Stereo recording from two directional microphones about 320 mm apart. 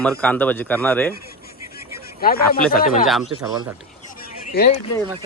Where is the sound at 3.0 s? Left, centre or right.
Centre.